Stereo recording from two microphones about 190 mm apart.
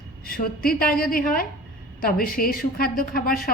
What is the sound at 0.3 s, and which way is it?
A woman's voice, 50° left (ahead or behind).